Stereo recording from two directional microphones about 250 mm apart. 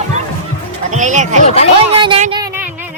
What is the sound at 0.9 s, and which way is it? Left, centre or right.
Speech, right.